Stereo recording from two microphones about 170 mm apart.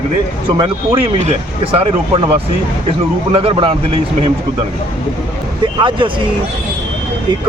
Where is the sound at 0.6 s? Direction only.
35° right (ahead or behind).